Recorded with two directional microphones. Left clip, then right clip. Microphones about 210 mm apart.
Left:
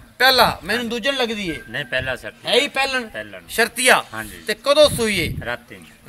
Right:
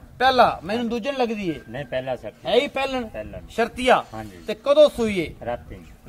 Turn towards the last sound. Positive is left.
turn(degrees=10)  # may be behind; listen again after turning